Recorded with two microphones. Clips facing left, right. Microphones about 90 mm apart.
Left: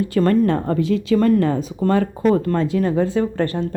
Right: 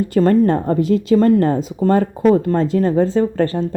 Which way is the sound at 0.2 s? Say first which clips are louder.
Right 3 dB; 30° right (ahead or behind).